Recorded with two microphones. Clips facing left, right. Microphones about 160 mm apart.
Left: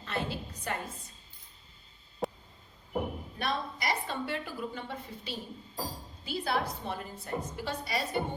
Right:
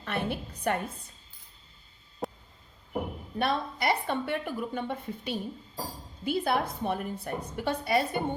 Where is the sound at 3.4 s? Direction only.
60° right (ahead or behind).